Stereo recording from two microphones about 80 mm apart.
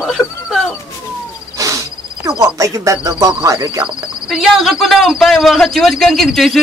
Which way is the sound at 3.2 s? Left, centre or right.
Right.